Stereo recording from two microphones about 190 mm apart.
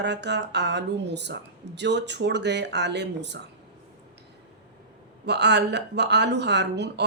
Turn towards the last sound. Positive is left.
turn(degrees=-65)  # may be behind; listen again after turning